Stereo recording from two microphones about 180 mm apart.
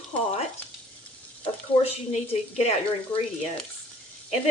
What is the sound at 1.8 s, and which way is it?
A woman's voice, 35° left (ahead or behind).